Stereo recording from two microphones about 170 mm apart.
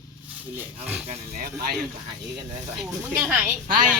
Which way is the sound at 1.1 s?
55° right (ahead or behind).